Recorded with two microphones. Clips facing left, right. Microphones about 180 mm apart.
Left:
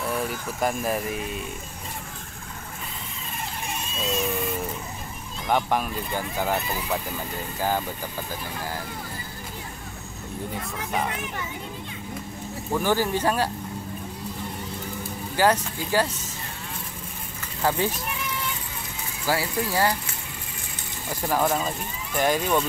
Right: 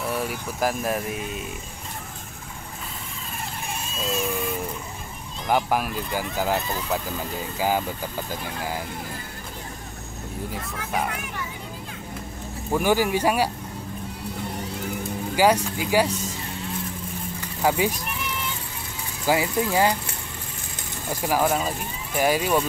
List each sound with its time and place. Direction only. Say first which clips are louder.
0.1 s speech: even; centre (ahead or behind)
4.0 s speech: even; centre (ahead or behind)
5.5 s speech: right 1 dB; 5° right (ahead or behind)
10.5 s speech: even; centre (ahead or behind)
12.7 s speech: right 2 dB; 10° right (ahead or behind)
15.3 s speech: right 2 dB; 10° right (ahead or behind)
17.6 s speech: right 2 dB; 10° right (ahead or behind)
19.2 s speech: right 4 dB; 20° right (ahead or behind)
21.1 s speech: right 1 dB; 10° right (ahead or behind)